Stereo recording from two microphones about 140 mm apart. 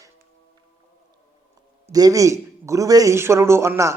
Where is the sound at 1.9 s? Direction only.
25° right (ahead or behind).